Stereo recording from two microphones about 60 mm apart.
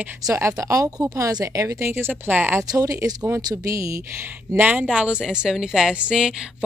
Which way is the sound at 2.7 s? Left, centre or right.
Right.